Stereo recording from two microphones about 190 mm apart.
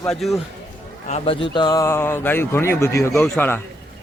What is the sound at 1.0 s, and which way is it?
Speech, 35° left (ahead or behind).